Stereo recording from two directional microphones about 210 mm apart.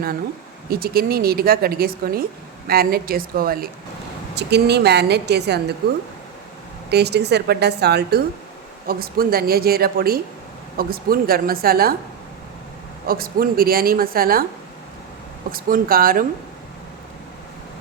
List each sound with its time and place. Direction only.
0.7 s speech: 45° right (ahead or behind)
6.9 s speech: 50° right (ahead or behind)
13.1 s speech: 45° right (ahead or behind)
15.5 s speech: 45° right (ahead or behind)